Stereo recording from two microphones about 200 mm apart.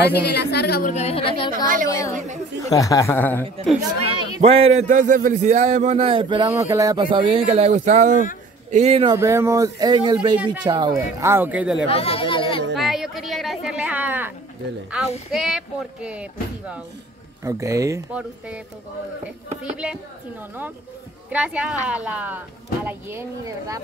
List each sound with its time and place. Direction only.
0.0 s a woman's voice: 55° left (ahead or behind)
0.9 s speech: 30° left (ahead or behind)
1.5 s a woman's voice: 45° right (ahead or behind)
1.9 s a man's voice: 15° left (ahead or behind)
2.1 s a man's voice: 35° right (ahead or behind)
2.6 s a man's voice: 15° left (ahead or behind)
4.4 s a man's voice: 30° right (ahead or behind)
9.2 s speech: 15° right (ahead or behind)
11.9 s speech: 30° left (ahead or behind)
12.7 s speech: centre (ahead or behind)
15.3 s speech: centre (ahead or behind)
19.6 s speech: 5° right (ahead or behind)
21.3 s speech: 5° right (ahead or behind)